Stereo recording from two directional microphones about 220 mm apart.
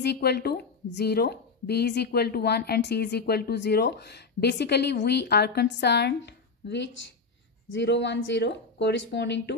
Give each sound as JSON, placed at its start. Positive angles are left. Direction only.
{"t": 0.0, "sound": "a woman's voice", "side_deg": 50}